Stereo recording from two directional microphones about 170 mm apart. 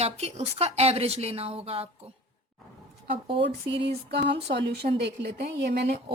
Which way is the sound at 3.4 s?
90° right.